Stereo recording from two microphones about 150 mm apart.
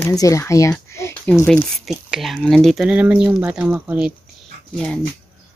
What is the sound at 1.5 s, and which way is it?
Speech, centre (ahead or behind).